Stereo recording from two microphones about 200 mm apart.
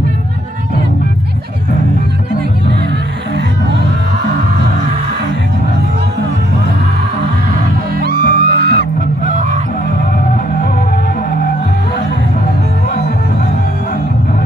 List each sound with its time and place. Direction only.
8.0 s music: 50° right (ahead or behind)